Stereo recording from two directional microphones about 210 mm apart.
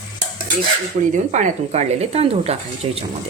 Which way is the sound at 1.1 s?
35° right (ahead or behind).